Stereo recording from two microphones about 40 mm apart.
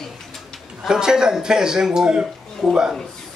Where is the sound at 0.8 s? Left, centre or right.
Centre.